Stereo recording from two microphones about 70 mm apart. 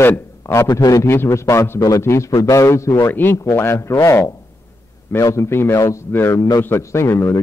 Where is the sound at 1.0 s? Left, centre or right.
Left.